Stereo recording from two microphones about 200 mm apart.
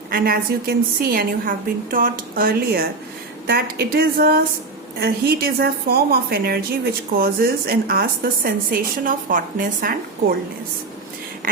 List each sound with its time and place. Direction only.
0.1 s a woman's voice: 50° right (ahead or behind)